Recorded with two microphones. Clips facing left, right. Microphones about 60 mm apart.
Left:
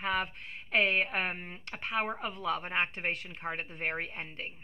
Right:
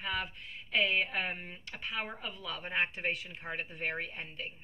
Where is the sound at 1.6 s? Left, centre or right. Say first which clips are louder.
Left 8 dB; left.